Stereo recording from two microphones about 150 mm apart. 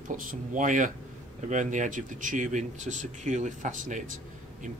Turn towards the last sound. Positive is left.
turn(degrees=-60)  # may be behind; listen again after turning